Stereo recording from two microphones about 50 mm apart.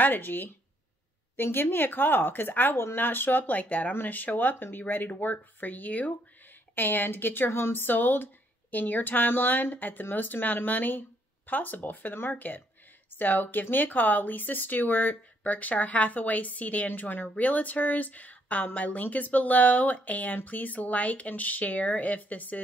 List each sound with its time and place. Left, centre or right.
0.0 s speech: left